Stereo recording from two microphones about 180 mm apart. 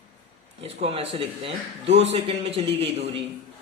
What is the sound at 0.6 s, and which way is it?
Speech, 35° right (ahead or behind).